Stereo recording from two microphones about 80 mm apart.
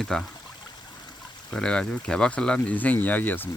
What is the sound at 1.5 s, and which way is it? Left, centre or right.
Speech, centre.